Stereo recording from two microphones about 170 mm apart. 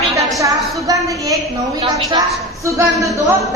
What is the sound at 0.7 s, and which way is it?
Speech, 20° right (ahead or behind).